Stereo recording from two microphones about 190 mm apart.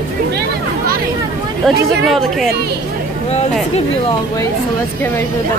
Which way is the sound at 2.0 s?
Centre (ahead or behind).